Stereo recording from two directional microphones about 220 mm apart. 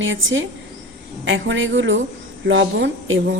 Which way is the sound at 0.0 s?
60° right (ahead or behind).